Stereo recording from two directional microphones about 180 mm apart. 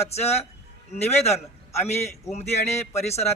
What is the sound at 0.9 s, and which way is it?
Speech, 35° left (ahead or behind).